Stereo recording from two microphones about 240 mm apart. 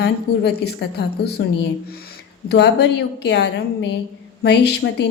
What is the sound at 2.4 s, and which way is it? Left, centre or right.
A woman's voice, left.